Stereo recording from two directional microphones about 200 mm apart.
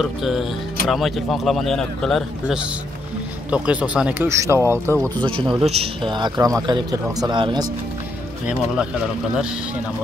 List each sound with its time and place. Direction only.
0.0 s a man's voice: centre (ahead or behind)
5.2 s a man's voice: 25° right (ahead or behind)